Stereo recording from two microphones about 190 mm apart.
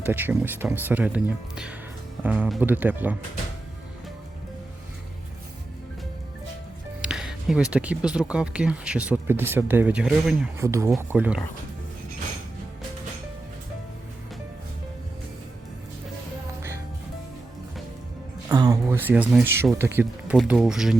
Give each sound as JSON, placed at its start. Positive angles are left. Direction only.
{"t": 0.0, "sound": "speech", "side_deg": -10}
{"t": 7.0, "sound": "music", "side_deg": -5}
{"t": 7.7, "sound": "speech", "side_deg": -5}
{"t": 10.6, "sound": "speech", "side_deg": -15}
{"t": 18.4, "sound": "a sound", "side_deg": -20}
{"t": 19.8, "sound": "speech", "side_deg": -10}